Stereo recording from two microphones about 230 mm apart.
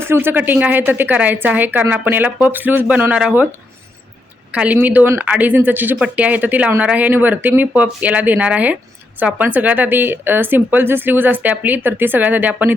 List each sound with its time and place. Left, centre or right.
0.0 s speech: centre
4.5 s speech: centre